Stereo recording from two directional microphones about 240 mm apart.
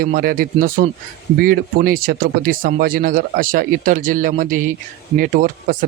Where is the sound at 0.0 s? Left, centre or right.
Right.